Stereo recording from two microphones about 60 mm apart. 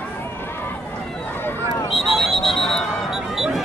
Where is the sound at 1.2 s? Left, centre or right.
Left.